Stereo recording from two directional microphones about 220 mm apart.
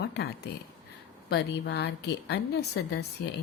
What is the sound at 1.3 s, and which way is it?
A woman's voice, 50° left (ahead or behind).